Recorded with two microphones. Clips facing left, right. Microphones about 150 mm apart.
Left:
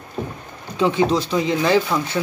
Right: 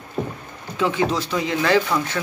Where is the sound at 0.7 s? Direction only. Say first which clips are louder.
Left 3 dB; 20° left (ahead or behind).